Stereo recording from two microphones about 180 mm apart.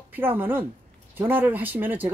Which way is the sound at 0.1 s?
10° right (ahead or behind).